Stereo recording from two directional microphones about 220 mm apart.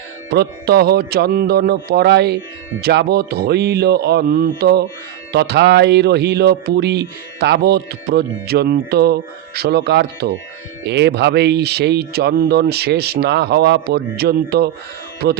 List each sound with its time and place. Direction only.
0.3 s speech: 45° right (ahead or behind)